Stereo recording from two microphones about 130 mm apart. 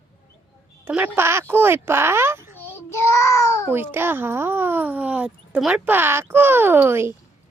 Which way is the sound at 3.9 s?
15° right (ahead or behind).